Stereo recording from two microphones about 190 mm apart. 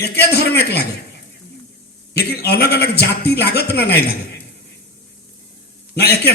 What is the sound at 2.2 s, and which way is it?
A man's voice, 55° left (ahead or behind).